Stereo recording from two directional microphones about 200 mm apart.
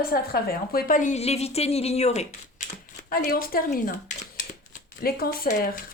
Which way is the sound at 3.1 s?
50° left (ahead or behind).